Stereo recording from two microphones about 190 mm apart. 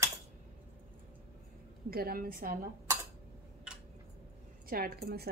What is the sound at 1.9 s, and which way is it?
Speech, 50° right (ahead or behind).